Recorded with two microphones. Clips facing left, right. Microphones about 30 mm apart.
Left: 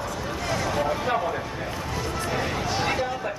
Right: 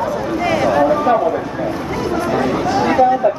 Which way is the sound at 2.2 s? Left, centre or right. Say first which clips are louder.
Right 11 dB; right.